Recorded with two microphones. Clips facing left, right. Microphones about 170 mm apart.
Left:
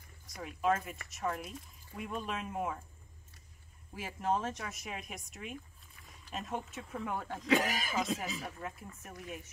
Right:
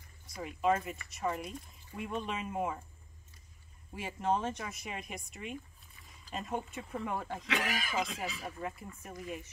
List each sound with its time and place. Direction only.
0.4 s speech: centre (ahead or behind)
3.9 s speech: centre (ahead or behind)
7.4 s speech: 40° left (ahead or behind)
8.4 s speech: centre (ahead or behind)